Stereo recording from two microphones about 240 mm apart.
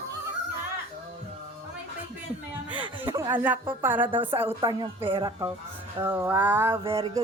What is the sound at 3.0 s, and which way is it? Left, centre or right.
Speech, centre.